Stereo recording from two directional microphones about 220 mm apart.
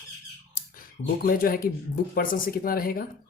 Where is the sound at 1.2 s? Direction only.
40° left (ahead or behind).